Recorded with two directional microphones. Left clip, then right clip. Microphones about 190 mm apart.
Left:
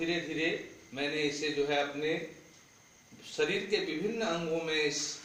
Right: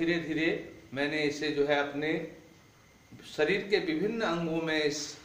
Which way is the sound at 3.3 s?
20° right (ahead or behind).